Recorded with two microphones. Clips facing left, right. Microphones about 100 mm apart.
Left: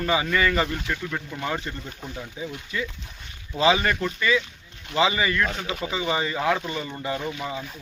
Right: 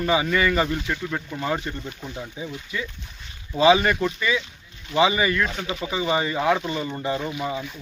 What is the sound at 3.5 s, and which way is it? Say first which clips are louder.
Speech: right 4 dB; 20° right (ahead or behind).